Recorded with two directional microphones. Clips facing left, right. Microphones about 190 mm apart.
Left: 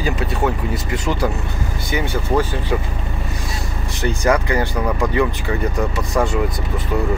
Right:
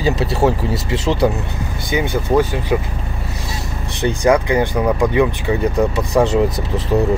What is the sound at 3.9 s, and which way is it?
Speech, 20° right (ahead or behind).